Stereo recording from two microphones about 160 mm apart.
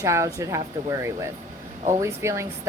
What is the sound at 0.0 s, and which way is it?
Speech, 20° right (ahead or behind).